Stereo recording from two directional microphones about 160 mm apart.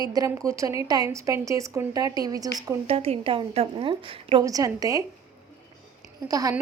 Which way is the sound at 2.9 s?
35° right (ahead or behind).